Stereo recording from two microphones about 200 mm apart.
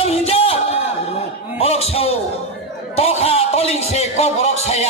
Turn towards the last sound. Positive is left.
turn(degrees=30)  # may be behind; listen again after turning